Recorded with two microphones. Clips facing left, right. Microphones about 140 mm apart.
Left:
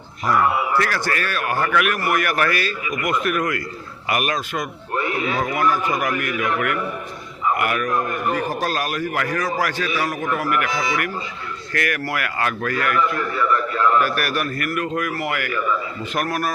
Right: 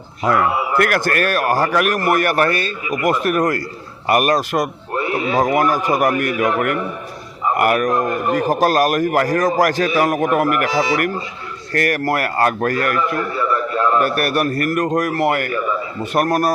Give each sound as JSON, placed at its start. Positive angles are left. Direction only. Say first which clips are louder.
{"t": 0.3, "sound": "a man's voice", "louder": "right 1 dB", "side_deg": -55}
{"t": 10.7, "sound": "a man's voice", "louder": "right 6 dB", "side_deg": -35}
{"t": 14.0, "sound": "a man's voice", "louder": "right 5 dB", "side_deg": -45}